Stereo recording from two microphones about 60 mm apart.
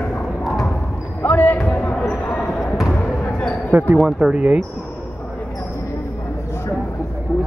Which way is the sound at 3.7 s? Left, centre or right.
Right.